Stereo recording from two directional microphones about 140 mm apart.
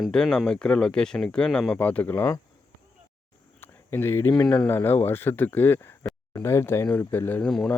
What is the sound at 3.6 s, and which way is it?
Speech, 15° left (ahead or behind).